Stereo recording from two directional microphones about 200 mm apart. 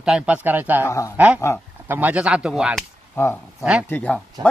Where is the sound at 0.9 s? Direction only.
15° left (ahead or behind).